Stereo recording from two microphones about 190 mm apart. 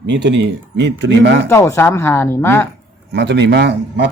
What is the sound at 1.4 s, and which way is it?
Speech, 15° left (ahead or behind).